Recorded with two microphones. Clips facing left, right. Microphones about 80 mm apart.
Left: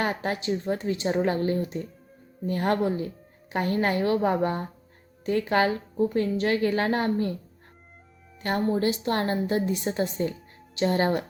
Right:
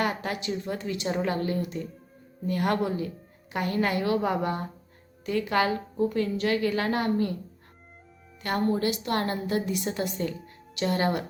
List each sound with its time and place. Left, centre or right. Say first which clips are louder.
0.0 s speech: left 1 dB; left
8.4 s a woman's voice: left 1 dB; left